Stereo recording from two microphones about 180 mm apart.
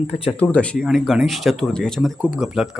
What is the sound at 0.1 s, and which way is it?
Speech, 35° left (ahead or behind).